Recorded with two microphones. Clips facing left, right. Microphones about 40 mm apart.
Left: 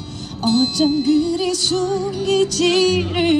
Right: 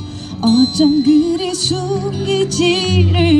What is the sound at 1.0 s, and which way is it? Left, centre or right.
Music, centre.